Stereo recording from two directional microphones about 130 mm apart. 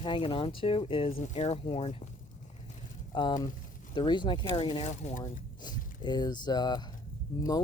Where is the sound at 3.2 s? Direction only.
35° left (ahead or behind).